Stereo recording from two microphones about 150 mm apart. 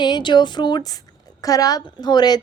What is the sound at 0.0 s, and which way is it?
A woman's voice, 30° left (ahead or behind).